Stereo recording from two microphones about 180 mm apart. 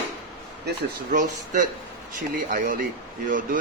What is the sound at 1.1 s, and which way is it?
Speech, 45° right (ahead or behind).